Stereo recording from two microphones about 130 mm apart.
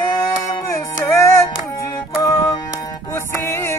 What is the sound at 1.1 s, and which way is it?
Music, 20° left (ahead or behind).